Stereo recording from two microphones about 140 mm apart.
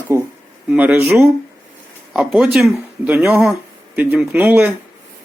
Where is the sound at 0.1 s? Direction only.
20° right (ahead or behind).